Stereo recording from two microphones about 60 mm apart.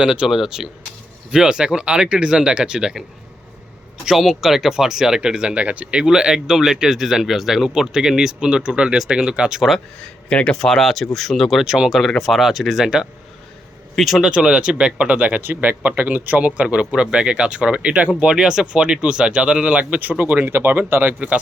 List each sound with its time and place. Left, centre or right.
0.0 s speech: centre
4.0 s speech: centre
10.2 s speech: centre
10.6 s speech: centre
14.3 s speech: centre; by 21.2 s right
21.2 s speech: right